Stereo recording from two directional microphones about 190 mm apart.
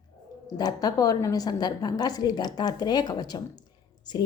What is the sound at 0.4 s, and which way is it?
A woman's voice, 20° left (ahead or behind).